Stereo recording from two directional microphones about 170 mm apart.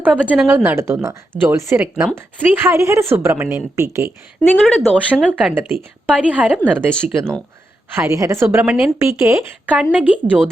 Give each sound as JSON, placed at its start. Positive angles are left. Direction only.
{"t": 0.0, "sound": "a woman's voice", "side_deg": -5}
{"t": 4.4, "sound": "a woman's voice", "side_deg": 0}